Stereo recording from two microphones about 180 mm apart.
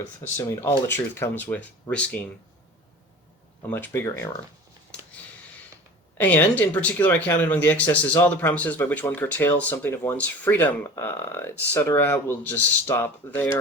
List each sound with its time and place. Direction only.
0.3 s speech: 15° left (ahead or behind)
3.7 s speech: 10° left (ahead or behind)
6.1 s speech: 10° left (ahead or behind)